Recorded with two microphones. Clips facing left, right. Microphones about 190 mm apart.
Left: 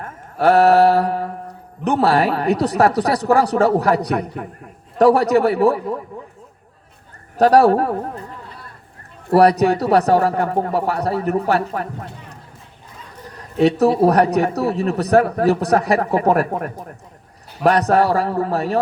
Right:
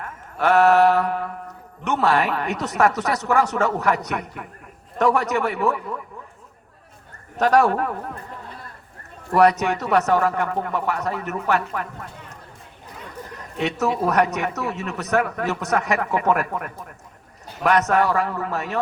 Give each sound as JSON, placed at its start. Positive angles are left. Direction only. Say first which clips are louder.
{"t": 0.0, "sound": "mantra", "louder": "left 6 dB", "side_deg": 35}
{"t": 4.9, "sound": "a man's voice", "louder": "left 7 dB", "side_deg": 35}
{"t": 7.3, "sound": "a man's voice", "louder": "left 6 dB", "side_deg": 35}
{"t": 9.3, "sound": "a man's voice", "louder": "left 4 dB", "side_deg": 35}
{"t": 13.6, "sound": "a man's voice", "louder": "left 9 dB", "side_deg": 35}